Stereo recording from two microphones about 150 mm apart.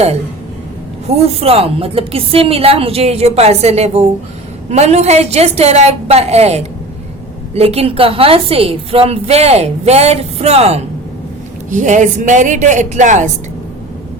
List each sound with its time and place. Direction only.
1.0 s a woman's voice: 40° right (ahead or behind)
11.7 s speech: 55° right (ahead or behind)